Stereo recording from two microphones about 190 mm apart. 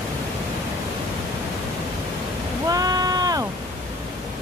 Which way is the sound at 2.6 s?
20° right (ahead or behind).